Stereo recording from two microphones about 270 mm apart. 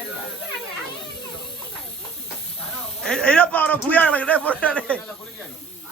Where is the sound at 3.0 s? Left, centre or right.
Centre.